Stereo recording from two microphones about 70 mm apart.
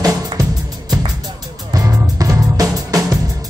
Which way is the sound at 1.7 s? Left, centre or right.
Right.